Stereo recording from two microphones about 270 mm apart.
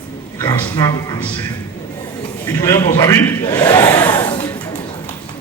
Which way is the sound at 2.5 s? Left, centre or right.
Centre.